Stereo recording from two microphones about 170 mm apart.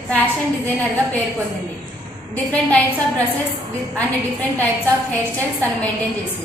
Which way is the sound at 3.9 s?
10° left (ahead or behind).